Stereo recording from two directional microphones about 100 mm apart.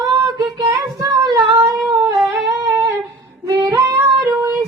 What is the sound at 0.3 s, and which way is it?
Child singing, 40° right (ahead or behind).